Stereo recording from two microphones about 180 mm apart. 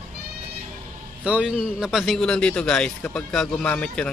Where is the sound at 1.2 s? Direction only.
5° right (ahead or behind).